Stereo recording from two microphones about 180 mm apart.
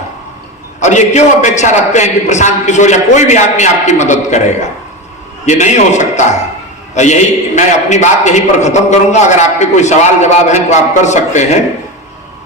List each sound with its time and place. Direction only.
0.8 s a man's voice: 40° left (ahead or behind)
5.5 s a man's voice: 40° left (ahead or behind)